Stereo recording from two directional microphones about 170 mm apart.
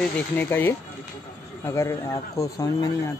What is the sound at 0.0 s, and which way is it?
Speech, 10° left (ahead or behind).